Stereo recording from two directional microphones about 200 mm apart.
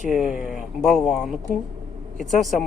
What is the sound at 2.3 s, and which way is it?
Speech, centre (ahead or behind).